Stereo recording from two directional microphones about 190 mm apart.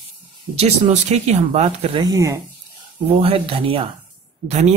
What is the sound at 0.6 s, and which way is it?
Speech, 35° right (ahead or behind).